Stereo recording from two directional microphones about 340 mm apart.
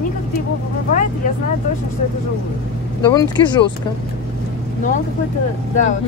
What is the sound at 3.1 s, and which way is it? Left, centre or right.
Speech, centre.